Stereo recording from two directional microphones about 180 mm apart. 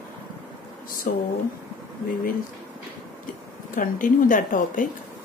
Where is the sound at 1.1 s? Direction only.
50° left (ahead or behind).